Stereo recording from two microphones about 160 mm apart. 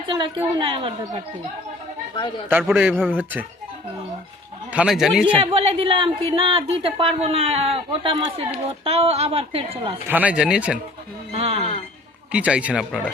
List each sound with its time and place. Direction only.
0.1 s speech: 30° right (ahead or behind)
2.5 s speech: 5° right (ahead or behind)
4.7 s a man's voice: 5° right (ahead or behind)
5.4 s speech: 35° right (ahead or behind)
10.1 s speech: 10° right (ahead or behind)
11.3 s speech: 40° right (ahead or behind)
12.3 s speech: 5° right (ahead or behind)